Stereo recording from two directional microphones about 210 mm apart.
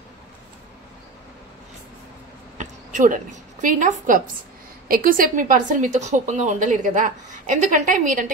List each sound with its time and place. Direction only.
2.5 s a woman's voice: 35° right (ahead or behind)